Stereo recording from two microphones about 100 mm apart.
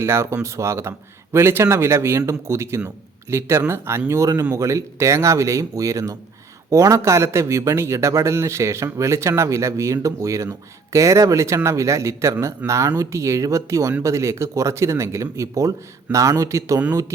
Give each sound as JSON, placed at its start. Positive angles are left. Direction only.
{"t": 0.0, "sound": "a man's voice", "side_deg": -25}